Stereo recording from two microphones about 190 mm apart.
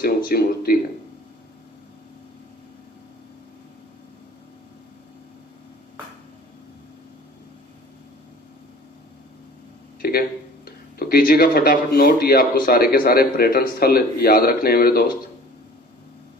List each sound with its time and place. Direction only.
0.3 s speech: 50° left (ahead or behind)
10.0 s a sound: 55° left (ahead or behind)
10.7 s speech: 50° left (ahead or behind)